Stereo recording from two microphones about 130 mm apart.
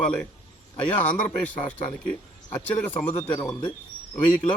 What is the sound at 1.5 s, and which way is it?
A man's voice, 10° left (ahead or behind).